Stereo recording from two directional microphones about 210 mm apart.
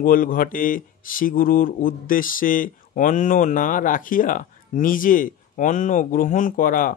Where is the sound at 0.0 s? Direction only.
40° left (ahead or behind).